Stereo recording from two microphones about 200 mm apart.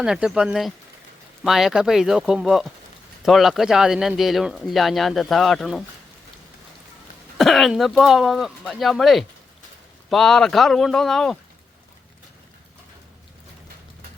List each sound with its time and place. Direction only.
0.0 s speech: 5° right (ahead or behind)
7.3 s speech: centre (ahead or behind)